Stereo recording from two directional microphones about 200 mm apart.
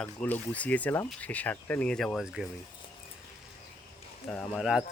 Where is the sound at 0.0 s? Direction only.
10° left (ahead or behind).